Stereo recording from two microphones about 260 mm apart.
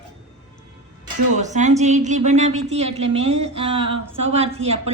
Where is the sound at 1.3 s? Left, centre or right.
Right.